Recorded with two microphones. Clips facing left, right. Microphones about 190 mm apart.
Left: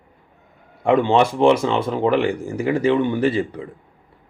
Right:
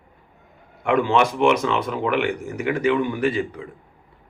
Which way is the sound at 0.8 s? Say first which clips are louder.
Left 3 dB; 30° left (ahead or behind).